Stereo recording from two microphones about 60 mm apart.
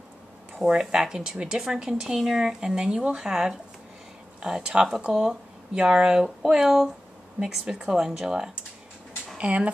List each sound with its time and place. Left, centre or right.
0.6 s speech: centre